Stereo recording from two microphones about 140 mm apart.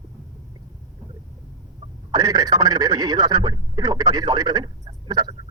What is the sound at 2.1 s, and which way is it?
Speech, 25° right (ahead or behind).